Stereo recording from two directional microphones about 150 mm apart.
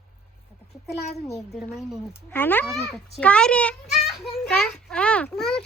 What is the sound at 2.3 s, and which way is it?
A woman's voice, 15° left (ahead or behind).